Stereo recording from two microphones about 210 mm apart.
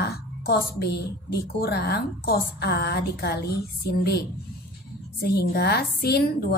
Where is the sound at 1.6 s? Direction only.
50° left (ahead or behind).